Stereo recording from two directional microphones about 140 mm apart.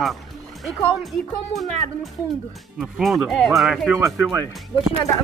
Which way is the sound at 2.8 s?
5° right (ahead or behind).